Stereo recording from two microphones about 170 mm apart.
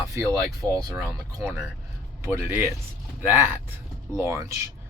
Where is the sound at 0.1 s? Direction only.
20° right (ahead or behind).